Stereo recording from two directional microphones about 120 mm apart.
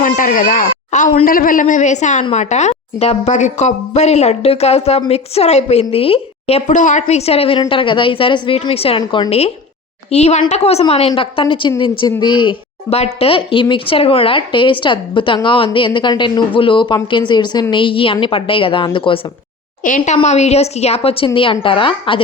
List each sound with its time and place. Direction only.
0.0 s a woman's voice: 90° left; by 9.0 s 55° left (ahead or behind)
9.0 s speech: 35° left (ahead or behind)
10.1 s a woman's voice: 65° left (ahead or behind); by 12.5 s 40° left (ahead or behind)
12.9 s a woman's voice: 55° left (ahead or behind)
19.8 s a woman's voice: 90° left
20.2 s a woman's voice: 65° left (ahead or behind); by 22.2 s 45° left (ahead or behind)